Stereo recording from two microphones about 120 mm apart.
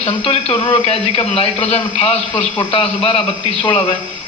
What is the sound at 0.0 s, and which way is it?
A man's voice, 55° left (ahead or behind).